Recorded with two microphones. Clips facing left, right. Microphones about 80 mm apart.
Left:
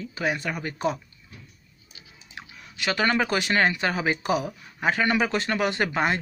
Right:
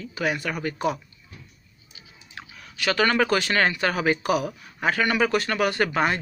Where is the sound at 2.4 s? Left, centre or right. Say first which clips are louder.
Right 1 dB; left.